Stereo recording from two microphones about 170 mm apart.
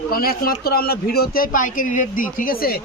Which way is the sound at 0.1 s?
60° left (ahead or behind).